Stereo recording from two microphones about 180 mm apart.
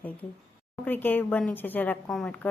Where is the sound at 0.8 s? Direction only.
10° left (ahead or behind).